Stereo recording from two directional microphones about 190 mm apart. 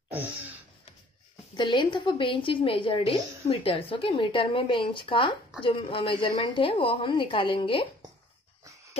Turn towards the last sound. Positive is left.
turn(degrees=25)  # may be behind; listen again after turning